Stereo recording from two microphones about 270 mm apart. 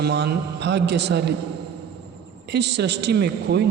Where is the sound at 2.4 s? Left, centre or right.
Right.